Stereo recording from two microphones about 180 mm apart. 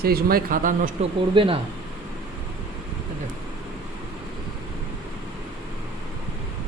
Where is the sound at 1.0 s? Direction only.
35° right (ahead or behind).